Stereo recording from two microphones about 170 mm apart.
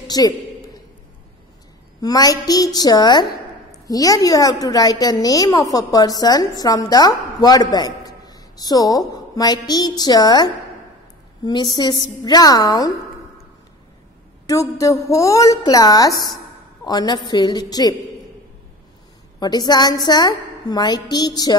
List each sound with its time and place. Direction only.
0.1 s a sound: 25° left (ahead or behind)
2.0 s a woman's voice: 20° left (ahead or behind)
14.4 s a woman's voice: 20° left (ahead or behind)
19.4 s a woman's voice: 25° left (ahead or behind)